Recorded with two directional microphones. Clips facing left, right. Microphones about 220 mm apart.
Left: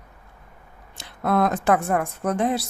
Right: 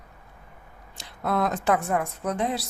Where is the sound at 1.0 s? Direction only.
55° left (ahead or behind).